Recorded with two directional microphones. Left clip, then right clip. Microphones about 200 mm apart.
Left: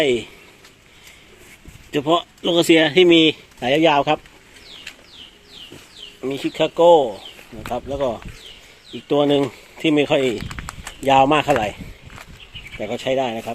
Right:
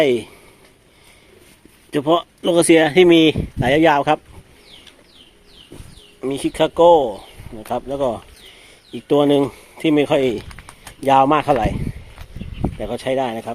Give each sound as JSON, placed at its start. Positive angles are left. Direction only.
{"t": 0.0, "sound": "speech", "side_deg": -10}
{"t": 1.9, "sound": "speech", "side_deg": -5}
{"t": 6.2, "sound": "speech", "side_deg": -15}
{"t": 12.8, "sound": "speech", "side_deg": -10}